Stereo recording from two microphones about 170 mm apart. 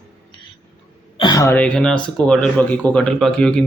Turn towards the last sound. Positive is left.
turn(degrees=5)  # may be behind; listen again after turning